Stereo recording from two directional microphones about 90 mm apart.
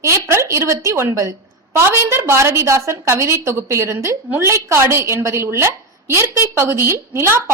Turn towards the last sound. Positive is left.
turn(degrees=-30)  # may be behind; listen again after turning